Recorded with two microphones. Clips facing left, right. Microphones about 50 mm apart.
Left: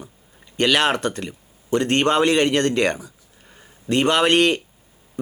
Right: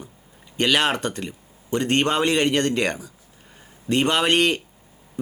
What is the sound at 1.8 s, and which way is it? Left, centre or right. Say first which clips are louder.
Speech: even; centre.